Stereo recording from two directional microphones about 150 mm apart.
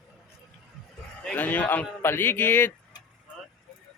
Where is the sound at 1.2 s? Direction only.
10° left (ahead or behind).